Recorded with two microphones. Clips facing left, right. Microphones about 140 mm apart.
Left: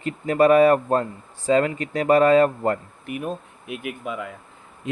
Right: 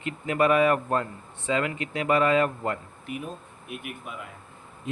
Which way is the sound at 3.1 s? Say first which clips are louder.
Left 6 dB; 65° left (ahead or behind).